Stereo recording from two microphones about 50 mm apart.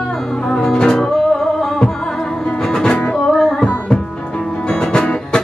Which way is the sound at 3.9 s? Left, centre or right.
Centre.